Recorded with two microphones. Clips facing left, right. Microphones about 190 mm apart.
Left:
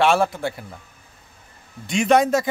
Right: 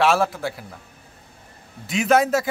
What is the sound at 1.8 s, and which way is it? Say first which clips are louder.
Speech: left 1 dB; 5° right (ahead or behind).